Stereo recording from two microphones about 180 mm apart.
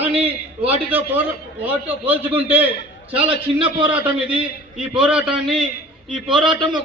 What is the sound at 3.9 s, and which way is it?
A man's voice, 10° right (ahead or behind).